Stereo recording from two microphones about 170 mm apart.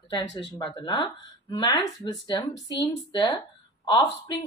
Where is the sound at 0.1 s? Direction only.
25° left (ahead or behind).